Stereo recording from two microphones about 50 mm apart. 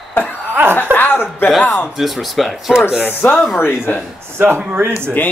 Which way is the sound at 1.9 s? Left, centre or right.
Centre.